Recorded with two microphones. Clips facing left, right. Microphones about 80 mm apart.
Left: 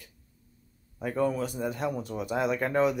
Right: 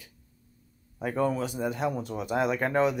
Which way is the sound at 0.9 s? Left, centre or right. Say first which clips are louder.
Even; centre.